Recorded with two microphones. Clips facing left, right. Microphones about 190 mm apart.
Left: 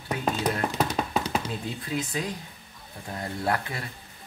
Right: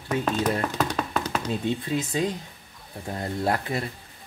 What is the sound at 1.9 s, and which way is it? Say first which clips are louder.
Speech: right 1 dB; 25° right (ahead or behind).